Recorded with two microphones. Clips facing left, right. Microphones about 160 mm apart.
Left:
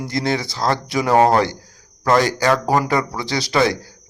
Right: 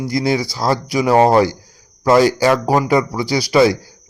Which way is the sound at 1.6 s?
10° right (ahead or behind).